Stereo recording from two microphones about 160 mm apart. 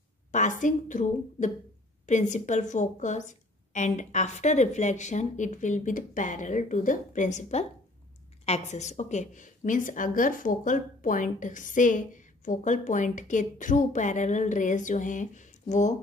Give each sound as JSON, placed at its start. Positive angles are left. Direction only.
{"t": 0.3, "sound": "a woman's voice", "side_deg": 50}